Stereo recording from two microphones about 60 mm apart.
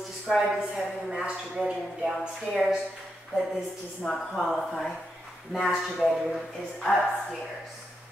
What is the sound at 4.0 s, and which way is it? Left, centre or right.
Speech, centre.